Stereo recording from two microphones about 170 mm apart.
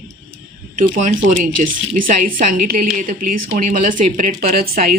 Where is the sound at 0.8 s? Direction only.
50° right (ahead or behind).